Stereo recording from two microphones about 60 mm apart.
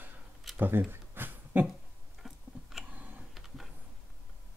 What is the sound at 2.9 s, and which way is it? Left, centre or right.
Computer keyboard, right.